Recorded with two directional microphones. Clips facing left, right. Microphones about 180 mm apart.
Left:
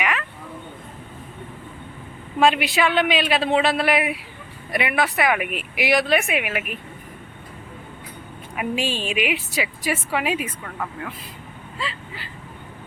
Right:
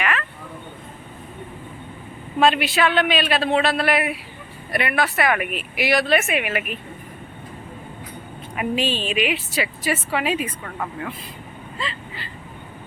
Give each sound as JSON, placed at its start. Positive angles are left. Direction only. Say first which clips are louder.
{"t": 0.0, "sound": "a sound", "louder": "right 1 dB", "side_deg": 15}
{"t": 2.4, "sound": "a woman's voice", "louder": "even", "side_deg": 15}
{"t": 8.5, "sound": "a woman's voice", "louder": "right 2 dB", "side_deg": 10}
{"t": 11.8, "sound": "speech", "louder": "even", "side_deg": 10}